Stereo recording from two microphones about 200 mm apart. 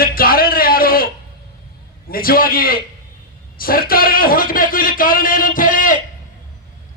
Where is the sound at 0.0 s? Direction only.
45° left (ahead or behind).